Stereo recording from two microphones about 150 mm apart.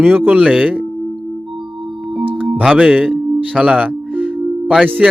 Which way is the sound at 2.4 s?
5° right (ahead or behind).